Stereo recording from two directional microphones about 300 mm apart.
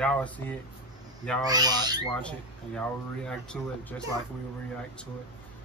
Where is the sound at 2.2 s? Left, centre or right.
Centre.